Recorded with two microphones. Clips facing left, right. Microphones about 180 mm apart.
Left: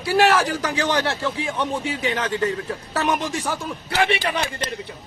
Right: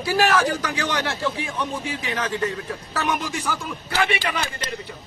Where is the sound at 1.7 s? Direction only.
Centre (ahead or behind).